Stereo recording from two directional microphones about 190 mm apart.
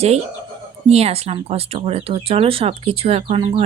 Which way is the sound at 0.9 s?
35° right (ahead or behind).